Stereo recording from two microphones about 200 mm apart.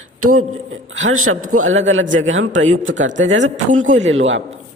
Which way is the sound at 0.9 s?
80° right.